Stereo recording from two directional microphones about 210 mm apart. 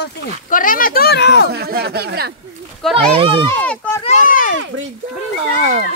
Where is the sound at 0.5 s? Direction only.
40° left (ahead or behind).